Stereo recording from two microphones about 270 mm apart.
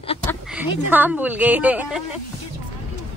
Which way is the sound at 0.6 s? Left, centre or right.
Centre.